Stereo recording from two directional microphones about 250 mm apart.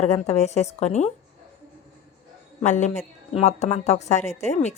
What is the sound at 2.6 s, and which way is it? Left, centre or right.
A woman's voice, left.